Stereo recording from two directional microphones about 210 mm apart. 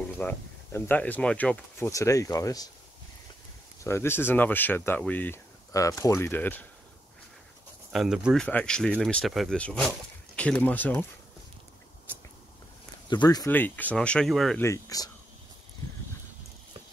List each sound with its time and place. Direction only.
0.2 s speech: 10° left (ahead or behind)
3.8 s speech: 10° left (ahead or behind)
7.9 s speech: centre (ahead or behind)
13.1 s speech: 20° left (ahead or behind); by 14.6 s centre (ahead or behind)
14.6 s speech: 15° left (ahead or behind)